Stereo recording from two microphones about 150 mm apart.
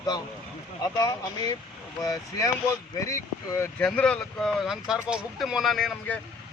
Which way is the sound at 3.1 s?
20° left (ahead or behind).